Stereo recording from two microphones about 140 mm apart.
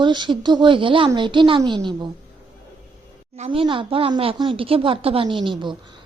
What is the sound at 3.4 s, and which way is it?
A woman's voice, 40° right (ahead or behind).